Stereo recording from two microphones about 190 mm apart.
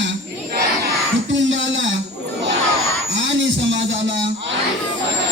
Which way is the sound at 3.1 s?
75° right (ahead or behind).